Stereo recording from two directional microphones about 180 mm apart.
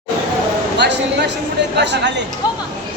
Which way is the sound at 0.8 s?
70° right (ahead or behind).